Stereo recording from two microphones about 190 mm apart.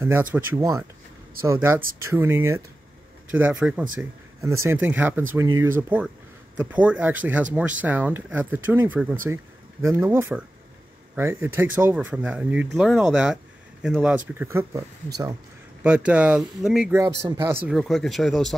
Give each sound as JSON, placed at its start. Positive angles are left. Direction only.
{"t": 0.0, "sound": "speech", "side_deg": -10}
{"t": 17.7, "sound": "speech", "side_deg": 0}